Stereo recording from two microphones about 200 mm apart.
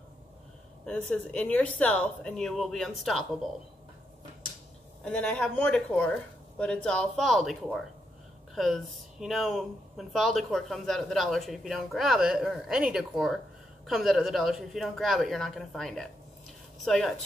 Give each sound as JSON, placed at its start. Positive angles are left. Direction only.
{"t": 0.8, "sound": "speech", "side_deg": 5}
{"t": 5.0, "sound": "speech", "side_deg": 5}